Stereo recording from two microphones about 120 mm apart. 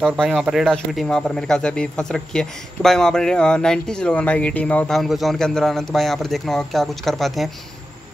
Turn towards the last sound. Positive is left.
turn(degrees=0)  # may be behind; listen again after turning